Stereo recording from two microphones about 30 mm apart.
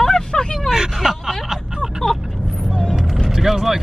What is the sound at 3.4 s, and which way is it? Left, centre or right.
Speech, centre.